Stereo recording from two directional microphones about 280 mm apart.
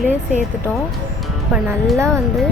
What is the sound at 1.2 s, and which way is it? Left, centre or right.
Speech, centre.